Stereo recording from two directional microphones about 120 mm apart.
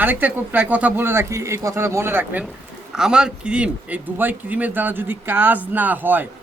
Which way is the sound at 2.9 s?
5° right (ahead or behind).